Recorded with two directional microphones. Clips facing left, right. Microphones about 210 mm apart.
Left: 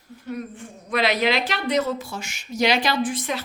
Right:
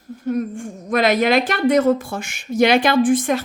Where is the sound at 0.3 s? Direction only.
45° right (ahead or behind).